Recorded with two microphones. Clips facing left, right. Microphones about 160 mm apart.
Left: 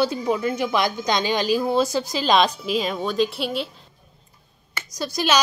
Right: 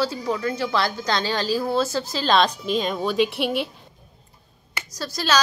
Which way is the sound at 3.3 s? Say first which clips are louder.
Right 2 dB; 60° right (ahead or behind).